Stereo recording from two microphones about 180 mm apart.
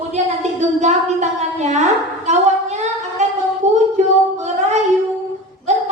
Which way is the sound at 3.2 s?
40° right (ahead or behind).